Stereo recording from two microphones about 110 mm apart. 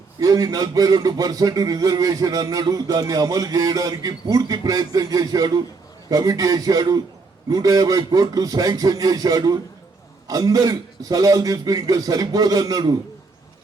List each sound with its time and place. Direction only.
0.2 s a man's voice: 35° right (ahead or behind)